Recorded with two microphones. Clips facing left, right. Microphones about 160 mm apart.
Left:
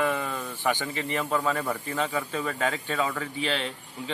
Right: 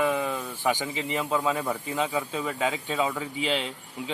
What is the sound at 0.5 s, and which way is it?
A man's voice, 10° right (ahead or behind).